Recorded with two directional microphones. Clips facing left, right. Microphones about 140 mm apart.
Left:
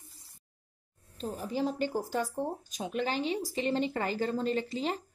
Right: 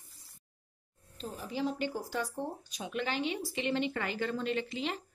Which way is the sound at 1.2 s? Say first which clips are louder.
Left 3 dB; 45° left (ahead or behind).